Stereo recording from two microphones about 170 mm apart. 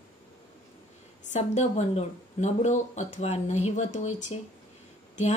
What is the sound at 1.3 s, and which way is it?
Speech, 40° left (ahead or behind).